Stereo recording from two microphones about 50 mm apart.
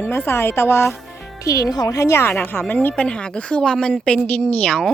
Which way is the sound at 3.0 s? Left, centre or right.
Centre.